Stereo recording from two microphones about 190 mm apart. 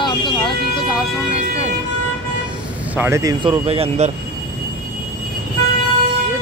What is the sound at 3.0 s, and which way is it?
Speech, 15° right (ahead or behind).